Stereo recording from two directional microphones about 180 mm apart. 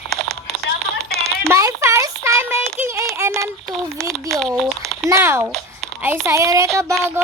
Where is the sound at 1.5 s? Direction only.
15° right (ahead or behind).